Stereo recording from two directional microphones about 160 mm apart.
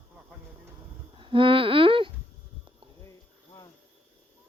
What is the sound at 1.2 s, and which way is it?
Babbling, 30° right (ahead or behind).